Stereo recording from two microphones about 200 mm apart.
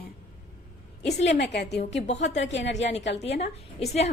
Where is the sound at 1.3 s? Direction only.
60° left (ahead or behind).